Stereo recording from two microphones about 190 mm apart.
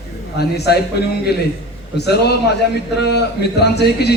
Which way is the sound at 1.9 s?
60° left (ahead or behind).